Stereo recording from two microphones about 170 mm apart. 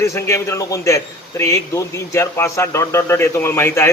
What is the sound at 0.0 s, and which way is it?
A man's voice, 15° left (ahead or behind).